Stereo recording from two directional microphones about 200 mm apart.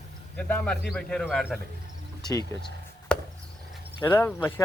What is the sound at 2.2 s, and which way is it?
Speech, 20° left (ahead or behind).